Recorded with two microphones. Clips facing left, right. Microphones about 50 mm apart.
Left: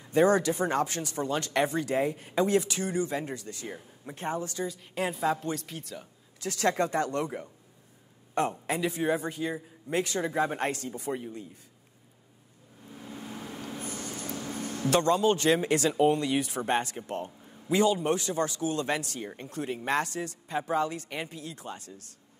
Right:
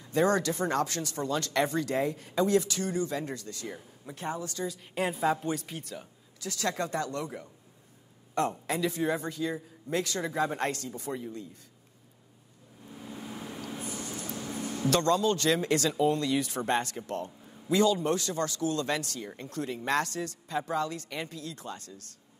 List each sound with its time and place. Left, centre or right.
0.0 s speech: centre
4.1 s a woman's voice: left
4.6 s a woman's voice: centre
6.4 s a woman's voice: left
8.5 s speech: centre
12.8 s a sound: centre
14.2 s a sound: left
14.5 s a sound: centre
14.9 s speech: centre